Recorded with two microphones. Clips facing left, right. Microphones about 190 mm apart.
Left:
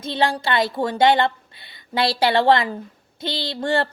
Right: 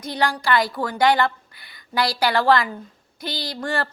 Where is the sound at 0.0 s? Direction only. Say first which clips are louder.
Left 2 dB; 25° left (ahead or behind).